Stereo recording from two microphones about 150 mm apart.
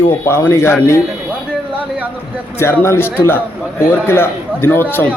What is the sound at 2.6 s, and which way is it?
A man's voice, 15° left (ahead or behind).